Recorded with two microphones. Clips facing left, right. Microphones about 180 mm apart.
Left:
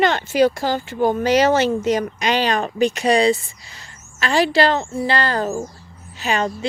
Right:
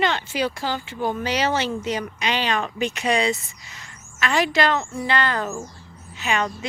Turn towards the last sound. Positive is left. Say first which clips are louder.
# left 3 dB
turn(degrees=35)  # may be behind; listen again after turning